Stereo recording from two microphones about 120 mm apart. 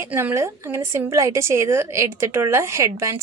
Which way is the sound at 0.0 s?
20° right (ahead or behind).